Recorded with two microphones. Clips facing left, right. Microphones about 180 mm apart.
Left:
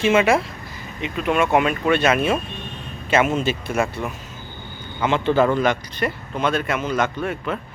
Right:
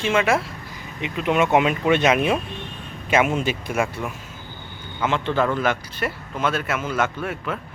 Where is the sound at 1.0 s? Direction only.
15° right (ahead or behind).